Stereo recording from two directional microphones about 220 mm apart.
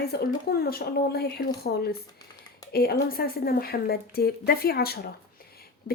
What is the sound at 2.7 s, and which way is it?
Speech, 45° left (ahead or behind).